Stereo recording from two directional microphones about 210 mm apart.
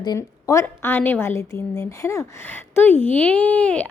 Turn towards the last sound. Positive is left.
turn(degrees=5)  # may be behind; listen again after turning